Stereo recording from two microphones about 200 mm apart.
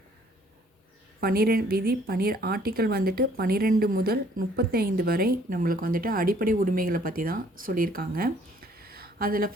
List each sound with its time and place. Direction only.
1.2 s a woman's voice: 50° right (ahead or behind)